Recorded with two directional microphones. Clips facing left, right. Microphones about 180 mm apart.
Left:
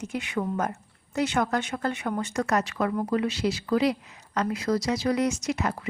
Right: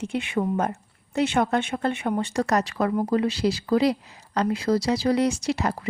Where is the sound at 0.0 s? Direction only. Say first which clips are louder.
Right 4 dB; 25° right (ahead or behind).